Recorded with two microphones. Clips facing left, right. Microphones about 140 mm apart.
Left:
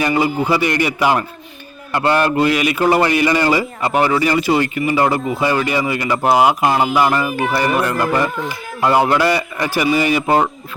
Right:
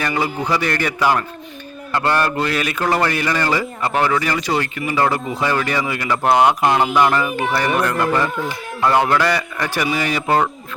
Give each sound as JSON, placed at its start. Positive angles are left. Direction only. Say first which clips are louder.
{"t": 0.0, "sound": "a man's voice", "louder": "left 5 dB", "side_deg": 5}
{"t": 10.2, "sound": "a man's voice", "louder": "right 2 dB", "side_deg": 15}